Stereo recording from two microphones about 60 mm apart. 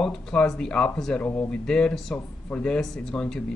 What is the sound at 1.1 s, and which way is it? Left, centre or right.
Speech, left.